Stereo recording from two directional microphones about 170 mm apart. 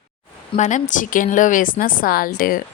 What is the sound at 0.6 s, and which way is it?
Speech, 45° left (ahead or behind).